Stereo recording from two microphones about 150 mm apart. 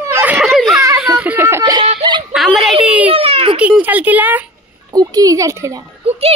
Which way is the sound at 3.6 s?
10° right (ahead or behind).